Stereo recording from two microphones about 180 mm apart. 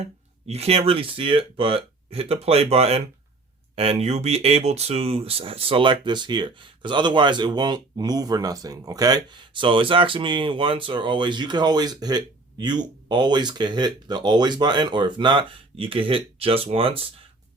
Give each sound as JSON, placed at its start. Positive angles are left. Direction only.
{"t": 0.0, "sound": "speech", "side_deg": -35}